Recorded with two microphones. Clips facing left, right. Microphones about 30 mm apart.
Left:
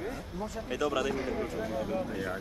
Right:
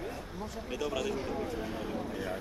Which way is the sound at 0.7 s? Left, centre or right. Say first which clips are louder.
Left 3 dB; left.